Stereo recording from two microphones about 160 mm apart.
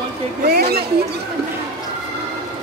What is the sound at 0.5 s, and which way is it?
Speech, 70° right (ahead or behind).